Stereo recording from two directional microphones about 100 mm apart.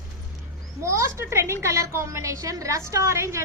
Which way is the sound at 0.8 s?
30° right (ahead or behind).